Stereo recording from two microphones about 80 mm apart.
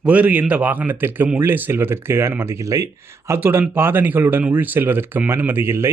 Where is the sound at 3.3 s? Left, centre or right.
Right.